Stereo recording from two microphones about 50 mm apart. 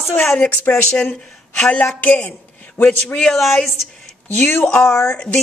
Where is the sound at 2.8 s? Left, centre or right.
Left.